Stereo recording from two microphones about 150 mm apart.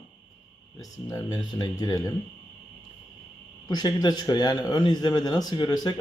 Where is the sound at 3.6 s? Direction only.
25° left (ahead or behind).